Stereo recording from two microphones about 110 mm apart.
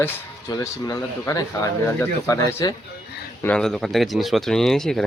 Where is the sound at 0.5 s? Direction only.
30° left (ahead or behind).